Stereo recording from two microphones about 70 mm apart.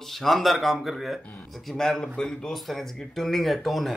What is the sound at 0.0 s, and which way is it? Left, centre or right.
A man's voice, centre.